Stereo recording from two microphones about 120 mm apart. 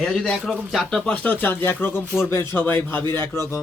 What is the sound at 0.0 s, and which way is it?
A man's voice, 5° left (ahead or behind).